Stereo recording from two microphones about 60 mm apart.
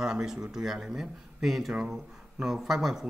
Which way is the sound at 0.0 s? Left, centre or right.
Centre.